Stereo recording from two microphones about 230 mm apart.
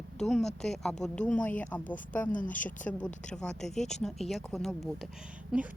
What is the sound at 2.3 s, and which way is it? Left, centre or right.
Speech, left.